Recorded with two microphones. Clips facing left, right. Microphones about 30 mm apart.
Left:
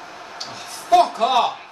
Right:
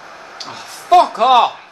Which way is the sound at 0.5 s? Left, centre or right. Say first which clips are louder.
Right 4 dB; right.